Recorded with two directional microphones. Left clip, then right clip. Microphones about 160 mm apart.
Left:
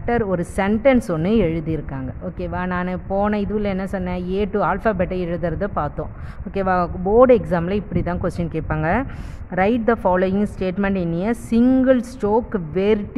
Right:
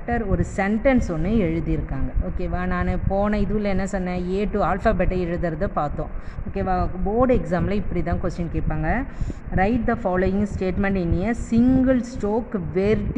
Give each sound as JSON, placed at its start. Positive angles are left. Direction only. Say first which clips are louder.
{"t": 0.0, "sound": "a woman's voice", "louder": "left 5 dB", "side_deg": 40}
{"t": 6.5, "sound": "speech", "louder": "left 5 dB", "side_deg": 50}
{"t": 7.2, "sound": "a woman's voice", "louder": "left 6 dB", "side_deg": 30}
{"t": 9.6, "sound": "a woman's voice", "louder": "left 4 dB", "side_deg": 40}